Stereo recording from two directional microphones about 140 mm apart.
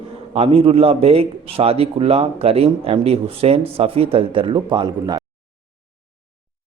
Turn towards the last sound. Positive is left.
turn(degrees=-30)  # may be behind; listen again after turning